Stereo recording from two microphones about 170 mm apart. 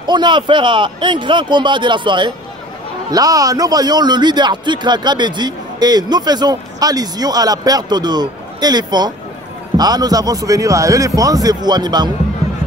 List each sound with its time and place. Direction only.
0.0 s a man's voice: 25° right (ahead or behind)